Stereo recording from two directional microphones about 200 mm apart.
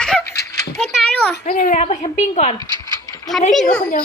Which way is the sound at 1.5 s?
45° left (ahead or behind).